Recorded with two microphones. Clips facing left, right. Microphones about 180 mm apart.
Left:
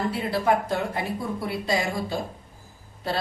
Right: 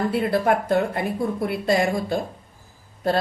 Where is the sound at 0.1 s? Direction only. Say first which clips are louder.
Right 3 dB; 55° right (ahead or behind).